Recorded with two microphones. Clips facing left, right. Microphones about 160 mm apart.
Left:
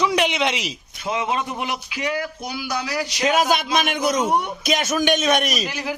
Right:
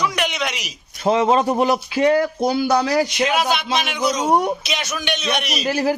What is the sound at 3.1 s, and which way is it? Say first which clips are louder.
A man's voice: even; 40° left (ahead or behind).